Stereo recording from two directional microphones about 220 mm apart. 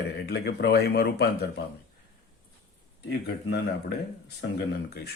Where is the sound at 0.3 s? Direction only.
45° left (ahead or behind).